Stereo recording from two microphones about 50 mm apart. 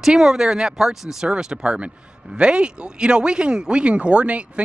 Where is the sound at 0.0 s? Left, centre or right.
Centre.